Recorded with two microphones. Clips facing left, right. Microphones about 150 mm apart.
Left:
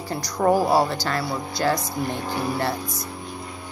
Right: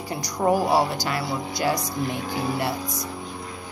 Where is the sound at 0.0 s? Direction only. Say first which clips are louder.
Left 2 dB; 15° right (ahead or behind).